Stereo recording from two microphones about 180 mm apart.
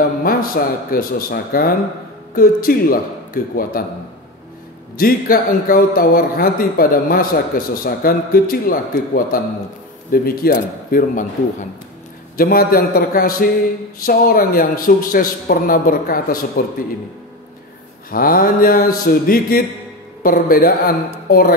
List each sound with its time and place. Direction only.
0.2 s speech: 55° left (ahead or behind)
4.9 s speech: 55° left (ahead or behind)
12.4 s speech: 55° left (ahead or behind)
18.1 s speech: 55° left (ahead or behind)